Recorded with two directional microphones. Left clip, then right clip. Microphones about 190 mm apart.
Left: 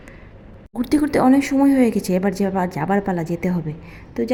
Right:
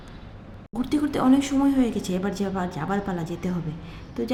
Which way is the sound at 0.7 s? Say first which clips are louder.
Left 7 dB; 25° left (ahead or behind).